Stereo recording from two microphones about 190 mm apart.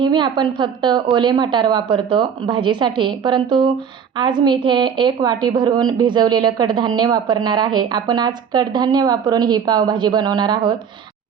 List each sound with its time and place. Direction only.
0.0 s a woman's voice: 25° right (ahead or behind)